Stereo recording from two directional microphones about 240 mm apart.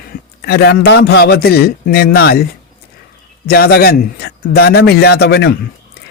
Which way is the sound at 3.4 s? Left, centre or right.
Left.